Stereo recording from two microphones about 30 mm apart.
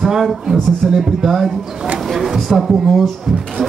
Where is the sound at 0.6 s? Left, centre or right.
Centre.